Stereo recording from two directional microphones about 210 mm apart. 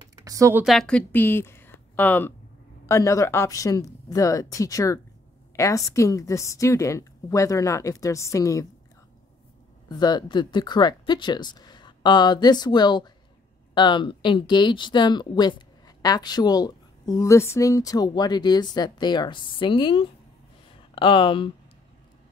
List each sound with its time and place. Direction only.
0.2 s speech: 15° right (ahead or behind)
0.7 s a woman's voice: 5° left (ahead or behind)
9.8 s a woman's voice: 20° left (ahead or behind)